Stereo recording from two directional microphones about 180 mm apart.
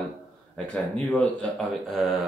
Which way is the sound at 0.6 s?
5° left (ahead or behind).